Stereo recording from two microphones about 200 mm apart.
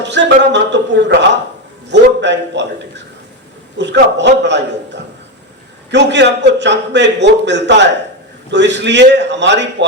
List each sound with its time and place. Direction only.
0.0 s a man's voice: 60° right (ahead or behind)
3.8 s a man's voice: 60° right (ahead or behind)